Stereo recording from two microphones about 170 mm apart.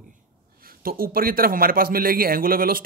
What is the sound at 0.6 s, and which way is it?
Speech, 60° right (ahead or behind).